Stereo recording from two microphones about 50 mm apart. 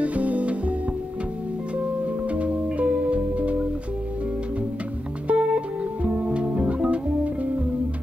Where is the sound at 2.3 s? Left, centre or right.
Right.